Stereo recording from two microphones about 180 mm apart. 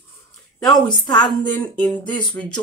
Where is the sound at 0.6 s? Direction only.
20° left (ahead or behind).